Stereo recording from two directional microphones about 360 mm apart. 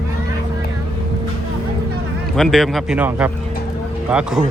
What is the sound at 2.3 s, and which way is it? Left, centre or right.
Speech, centre.